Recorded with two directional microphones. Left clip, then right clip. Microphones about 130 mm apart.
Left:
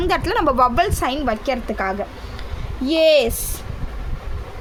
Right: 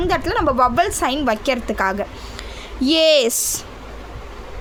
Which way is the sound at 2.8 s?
45° right (ahead or behind).